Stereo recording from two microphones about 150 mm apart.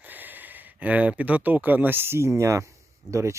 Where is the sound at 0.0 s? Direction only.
10° right (ahead or behind).